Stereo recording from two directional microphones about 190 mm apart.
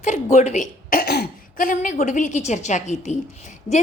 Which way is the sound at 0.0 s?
40° left (ahead or behind).